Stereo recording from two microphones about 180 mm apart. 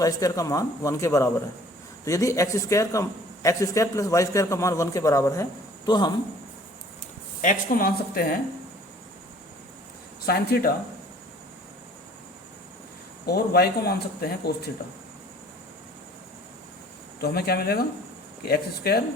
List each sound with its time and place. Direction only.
0.0 s a man's voice: 20° left (ahead or behind)
7.4 s speech: 50° left (ahead or behind)
10.2 s speech: 60° left (ahead or behind)
13.2 s speech: 60° left (ahead or behind)
17.2 s speech: 60° left (ahead or behind)